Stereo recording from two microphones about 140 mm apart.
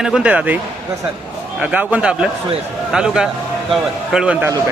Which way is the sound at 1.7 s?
10° right (ahead or behind).